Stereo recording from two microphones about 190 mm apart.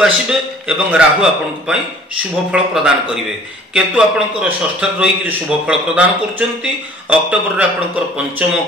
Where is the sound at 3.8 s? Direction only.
5° right (ahead or behind).